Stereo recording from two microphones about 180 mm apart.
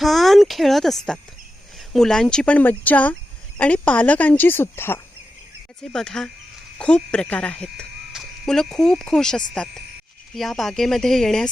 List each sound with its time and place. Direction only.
0.0 s speech: centre (ahead or behind)